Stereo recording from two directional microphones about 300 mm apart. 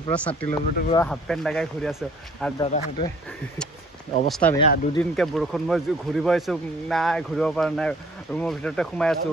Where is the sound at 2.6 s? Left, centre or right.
Centre.